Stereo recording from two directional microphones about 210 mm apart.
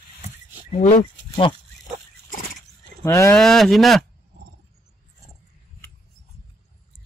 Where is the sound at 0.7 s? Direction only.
35° left (ahead or behind).